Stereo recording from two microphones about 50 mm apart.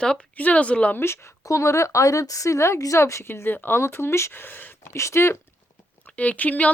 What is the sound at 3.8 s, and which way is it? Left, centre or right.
Speech, left.